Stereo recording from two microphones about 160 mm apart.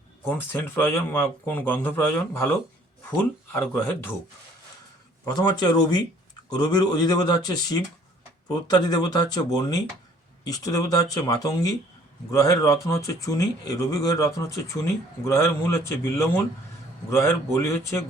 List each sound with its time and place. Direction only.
0.3 s speech: 15° left (ahead or behind)
3.5 s speech: 15° left (ahead or behind)
5.2 s speech: 25° left (ahead or behind)